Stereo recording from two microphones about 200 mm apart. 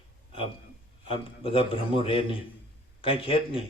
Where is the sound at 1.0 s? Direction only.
30° left (ahead or behind).